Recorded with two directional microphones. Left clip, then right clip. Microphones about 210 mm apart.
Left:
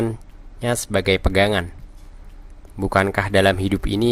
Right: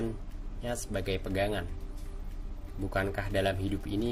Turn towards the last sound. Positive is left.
turn(degrees=45)  # may be behind; listen again after turning